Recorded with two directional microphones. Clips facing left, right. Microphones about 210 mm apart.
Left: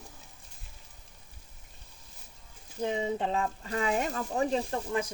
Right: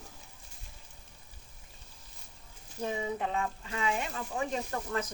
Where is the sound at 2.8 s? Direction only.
20° left (ahead or behind).